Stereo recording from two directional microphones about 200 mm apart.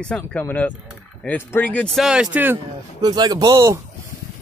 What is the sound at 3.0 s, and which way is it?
Speech, 20° right (ahead or behind).